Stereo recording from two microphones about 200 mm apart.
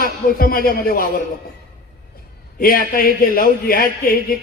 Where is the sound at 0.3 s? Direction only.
45° left (ahead or behind).